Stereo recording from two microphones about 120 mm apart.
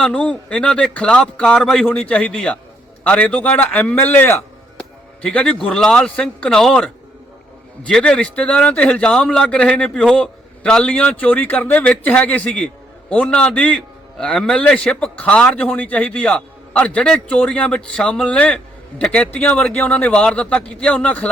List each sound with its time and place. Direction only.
0.0 s a man's voice: 10° left (ahead or behind)